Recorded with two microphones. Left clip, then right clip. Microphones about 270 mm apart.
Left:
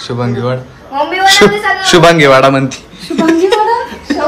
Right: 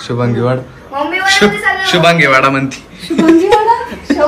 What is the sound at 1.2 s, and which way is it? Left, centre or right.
Speech, left.